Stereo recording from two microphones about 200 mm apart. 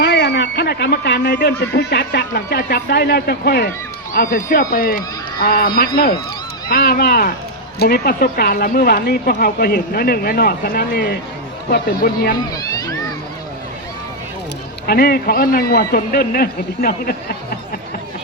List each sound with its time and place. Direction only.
0.0 s speech: 60° left (ahead or behind)
14.8 s speech: 50° left (ahead or behind)